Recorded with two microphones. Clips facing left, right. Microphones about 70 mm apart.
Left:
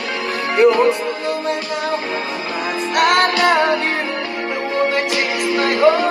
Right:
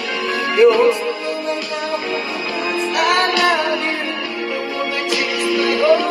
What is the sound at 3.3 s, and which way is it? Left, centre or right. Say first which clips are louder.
Music: left 2 dB; left.